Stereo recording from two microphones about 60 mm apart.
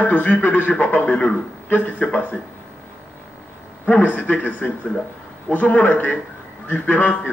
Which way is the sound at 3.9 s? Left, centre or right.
Left.